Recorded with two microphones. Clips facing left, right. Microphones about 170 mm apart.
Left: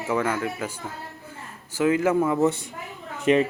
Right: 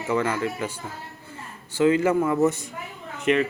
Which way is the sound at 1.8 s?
5° left (ahead or behind).